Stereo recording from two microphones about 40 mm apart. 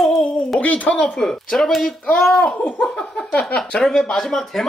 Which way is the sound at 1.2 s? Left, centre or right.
Centre.